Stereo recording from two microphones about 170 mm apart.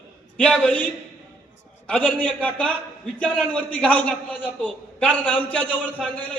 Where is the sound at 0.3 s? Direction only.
5° left (ahead or behind).